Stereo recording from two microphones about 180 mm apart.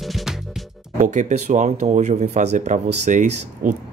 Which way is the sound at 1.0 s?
45° right (ahead or behind).